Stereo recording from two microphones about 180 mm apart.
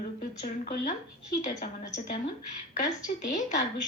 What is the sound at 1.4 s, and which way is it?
Speech, 40° left (ahead or behind).